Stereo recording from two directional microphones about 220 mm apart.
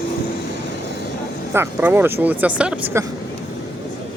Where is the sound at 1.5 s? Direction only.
10° right (ahead or behind).